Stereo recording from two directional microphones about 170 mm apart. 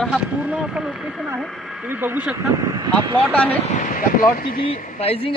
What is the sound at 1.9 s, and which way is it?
Speech, 10° right (ahead or behind).